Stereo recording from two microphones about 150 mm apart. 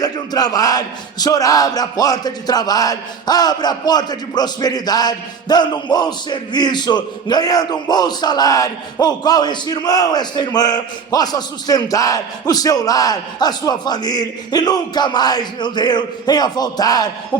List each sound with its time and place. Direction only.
0.0 s speech: 25° left (ahead or behind)